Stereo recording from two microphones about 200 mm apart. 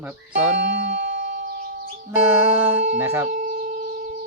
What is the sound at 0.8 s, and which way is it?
Music, 35° right (ahead or behind).